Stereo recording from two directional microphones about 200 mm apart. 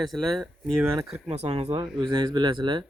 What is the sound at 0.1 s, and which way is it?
Speech, centre (ahead or behind).